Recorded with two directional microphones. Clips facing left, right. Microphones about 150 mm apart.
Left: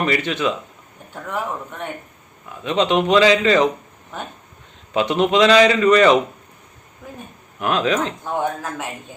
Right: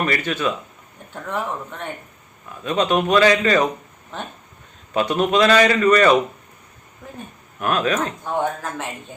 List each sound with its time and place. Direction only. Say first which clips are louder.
0.0 s a man's voice: left 2 dB; 20° left (ahead or behind)
2.6 s a man's voice: left 1 dB; 20° left (ahead or behind)
4.9 s a man's voice: left 2 dB; 20° left (ahead or behind)
7.6 s speech: left 1 dB; 20° left (ahead or behind)